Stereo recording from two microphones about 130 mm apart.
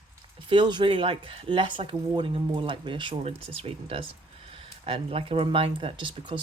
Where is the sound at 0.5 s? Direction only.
35° right (ahead or behind).